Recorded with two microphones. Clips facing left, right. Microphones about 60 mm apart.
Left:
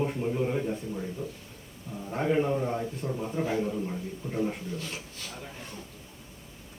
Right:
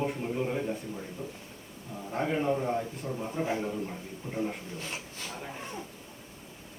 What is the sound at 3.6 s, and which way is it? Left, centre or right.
Speech, centre.